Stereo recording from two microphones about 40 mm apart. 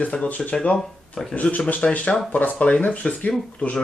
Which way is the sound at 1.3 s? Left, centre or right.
Left.